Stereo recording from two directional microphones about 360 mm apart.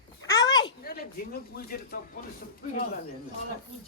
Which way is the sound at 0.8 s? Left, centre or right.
Left.